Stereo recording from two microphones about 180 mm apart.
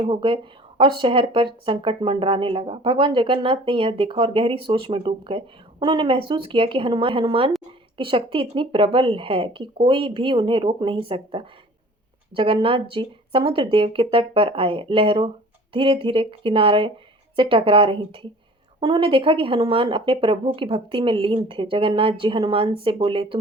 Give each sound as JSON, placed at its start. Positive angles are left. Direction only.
{"t": 0.0, "sound": "speech", "side_deg": -25}